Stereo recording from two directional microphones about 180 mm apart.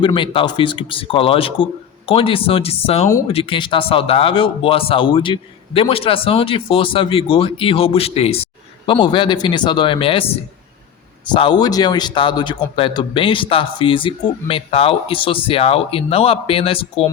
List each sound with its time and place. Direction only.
0.0 s a man's voice: 25° left (ahead or behind)